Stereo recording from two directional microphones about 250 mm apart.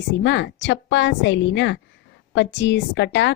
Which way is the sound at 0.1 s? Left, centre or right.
Left.